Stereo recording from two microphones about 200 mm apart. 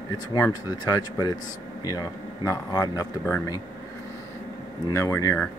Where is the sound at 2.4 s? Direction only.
20° left (ahead or behind).